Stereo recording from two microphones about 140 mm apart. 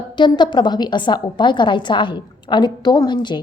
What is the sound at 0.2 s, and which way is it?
A woman's voice, 30° left (ahead or behind).